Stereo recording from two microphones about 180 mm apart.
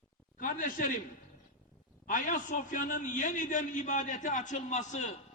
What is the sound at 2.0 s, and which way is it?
A man's voice, 45° left (ahead or behind).